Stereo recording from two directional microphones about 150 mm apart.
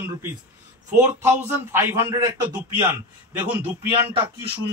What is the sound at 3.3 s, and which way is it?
Speech, 10° right (ahead or behind).